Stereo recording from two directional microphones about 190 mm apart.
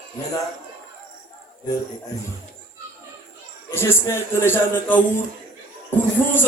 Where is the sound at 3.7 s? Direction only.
15° left (ahead or behind).